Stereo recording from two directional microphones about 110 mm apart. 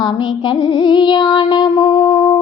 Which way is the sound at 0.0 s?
45° left (ahead or behind).